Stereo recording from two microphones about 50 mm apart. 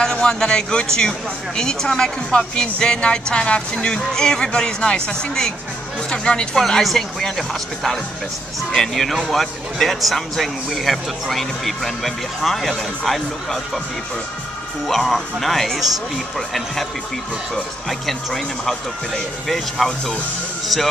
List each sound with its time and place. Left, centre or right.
0.0 s a man's voice: centre
6.8 s a man's voice: centre
14.9 s speech: centre
17.8 s speech: centre